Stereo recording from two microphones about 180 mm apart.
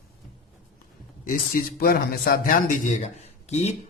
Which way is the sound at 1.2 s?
50° left (ahead or behind).